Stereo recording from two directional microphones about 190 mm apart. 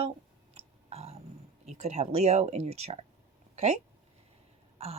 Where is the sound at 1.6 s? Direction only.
35° right (ahead or behind).